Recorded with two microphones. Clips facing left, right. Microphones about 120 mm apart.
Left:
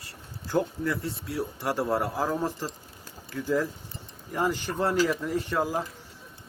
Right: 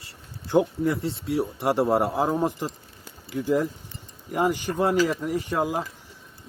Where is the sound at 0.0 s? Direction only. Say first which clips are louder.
Even; 25° right (ahead or behind).